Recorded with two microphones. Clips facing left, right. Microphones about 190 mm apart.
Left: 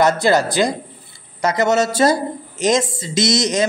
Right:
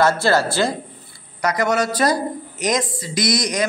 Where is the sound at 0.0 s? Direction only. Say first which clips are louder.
Left 2 dB; 15° left (ahead or behind).